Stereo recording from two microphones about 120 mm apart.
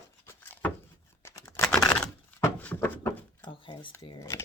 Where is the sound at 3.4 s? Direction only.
45° left (ahead or behind).